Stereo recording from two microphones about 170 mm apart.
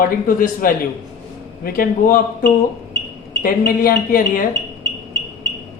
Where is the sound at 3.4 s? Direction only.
55° left (ahead or behind).